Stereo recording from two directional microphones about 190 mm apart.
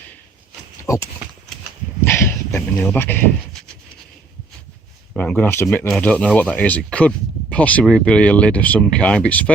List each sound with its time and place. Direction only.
0.9 s speech: 15° left (ahead or behind)
2.0 s a sound: 10° left (ahead or behind)
5.1 s speech: 5° left (ahead or behind)